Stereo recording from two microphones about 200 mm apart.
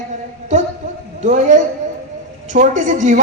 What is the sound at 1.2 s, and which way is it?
A man's voice, 35° right (ahead or behind).